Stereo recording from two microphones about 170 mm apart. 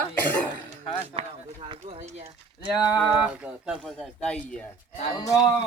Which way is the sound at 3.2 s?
5° right (ahead or behind).